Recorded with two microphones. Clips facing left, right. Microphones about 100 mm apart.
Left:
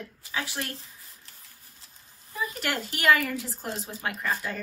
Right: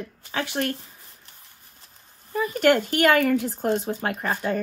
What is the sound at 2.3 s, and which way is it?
Speech, 60° right (ahead or behind).